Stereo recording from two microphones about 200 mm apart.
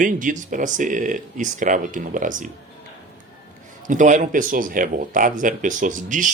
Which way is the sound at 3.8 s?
40° right (ahead or behind).